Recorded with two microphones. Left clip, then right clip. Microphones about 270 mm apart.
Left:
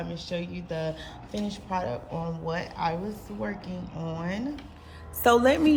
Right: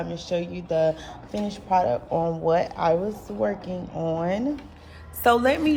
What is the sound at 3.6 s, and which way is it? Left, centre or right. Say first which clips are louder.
Speech: right 9 dB; centre.